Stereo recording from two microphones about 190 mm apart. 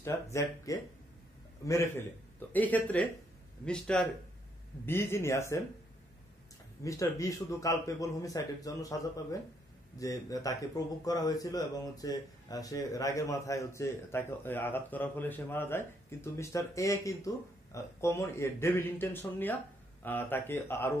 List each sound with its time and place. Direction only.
0.0 s speech: 15° left (ahead or behind)
6.8 s speech: 15° left (ahead or behind)